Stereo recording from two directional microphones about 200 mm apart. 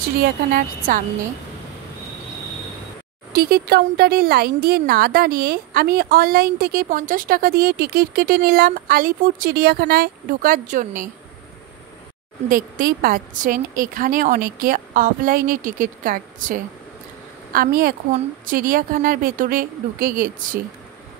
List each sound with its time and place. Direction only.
0.2 s a woman's voice: 45° right (ahead or behind)
3.3 s a woman's voice: 50° right (ahead or behind)
12.4 s a woman's voice: 45° right (ahead or behind)